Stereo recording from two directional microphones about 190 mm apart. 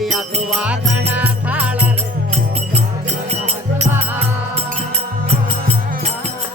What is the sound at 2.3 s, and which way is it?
Music, 35° right (ahead or behind).